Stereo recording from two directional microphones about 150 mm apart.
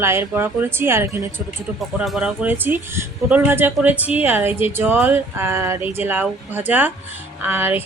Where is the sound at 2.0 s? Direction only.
5° right (ahead or behind).